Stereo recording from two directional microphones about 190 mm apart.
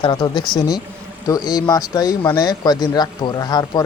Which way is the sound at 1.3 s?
20° left (ahead or behind).